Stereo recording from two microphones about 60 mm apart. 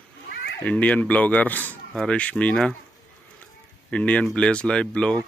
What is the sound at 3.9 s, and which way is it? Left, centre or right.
Speech, left.